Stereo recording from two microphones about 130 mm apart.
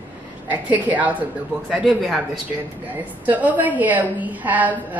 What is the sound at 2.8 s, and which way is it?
A woman's voice, 15° right (ahead or behind).